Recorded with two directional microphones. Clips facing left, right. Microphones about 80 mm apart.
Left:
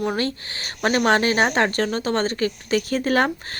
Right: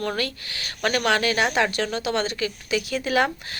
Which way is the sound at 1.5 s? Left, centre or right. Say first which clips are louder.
Left 2 dB; left.